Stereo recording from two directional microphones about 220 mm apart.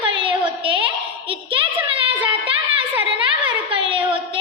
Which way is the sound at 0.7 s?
25° right (ahead or behind).